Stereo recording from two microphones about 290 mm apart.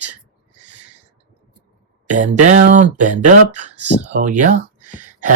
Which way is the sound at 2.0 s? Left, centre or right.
Right.